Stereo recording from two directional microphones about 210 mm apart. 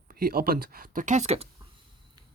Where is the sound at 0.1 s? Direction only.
45° right (ahead or behind).